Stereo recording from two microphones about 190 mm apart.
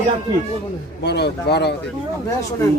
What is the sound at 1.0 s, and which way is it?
Speech, 60° left (ahead or behind).